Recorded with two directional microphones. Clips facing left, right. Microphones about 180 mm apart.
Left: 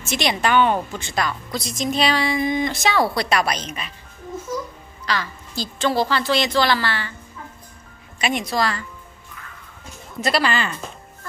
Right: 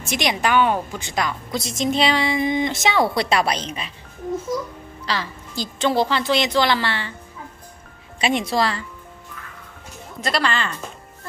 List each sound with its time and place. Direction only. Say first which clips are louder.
0.0 s a woman's voice: even; 15° right (ahead or behind)
5.0 s a woman's voice: left 1 dB; 30° right (ahead or behind)
5.5 s a woman's voice: right 1 dB; 20° right (ahead or behind)
8.2 s a woman's voice: right 2 dB; 25° right (ahead or behind)
10.2 s a woman's voice: left 2 dB; 5° left (ahead or behind)